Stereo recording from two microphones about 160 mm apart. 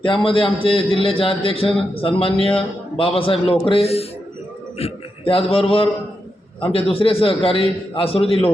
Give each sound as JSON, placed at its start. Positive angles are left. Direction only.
{"t": 0.3, "sound": "a man's voice", "side_deg": 35}